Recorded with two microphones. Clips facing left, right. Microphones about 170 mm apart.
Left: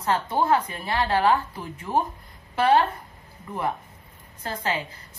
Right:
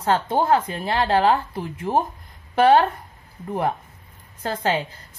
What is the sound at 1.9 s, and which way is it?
Speech, 35° right (ahead or behind).